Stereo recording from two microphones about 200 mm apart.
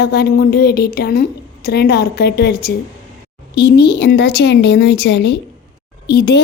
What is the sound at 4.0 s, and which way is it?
Speech, 55° left (ahead or behind).